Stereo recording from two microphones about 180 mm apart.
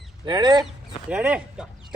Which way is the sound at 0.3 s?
25° right (ahead or behind).